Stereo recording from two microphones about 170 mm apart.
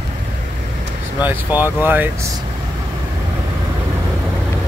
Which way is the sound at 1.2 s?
10° right (ahead or behind).